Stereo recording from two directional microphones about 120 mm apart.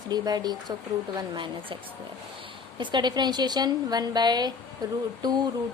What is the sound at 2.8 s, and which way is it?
A woman's voice, 40° right (ahead or behind).